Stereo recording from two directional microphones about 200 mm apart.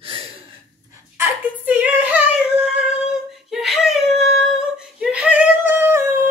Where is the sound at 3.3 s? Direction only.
Centre (ahead or behind).